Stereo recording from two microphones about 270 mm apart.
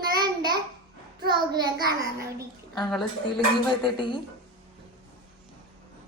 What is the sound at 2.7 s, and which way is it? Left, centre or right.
Speech, centre.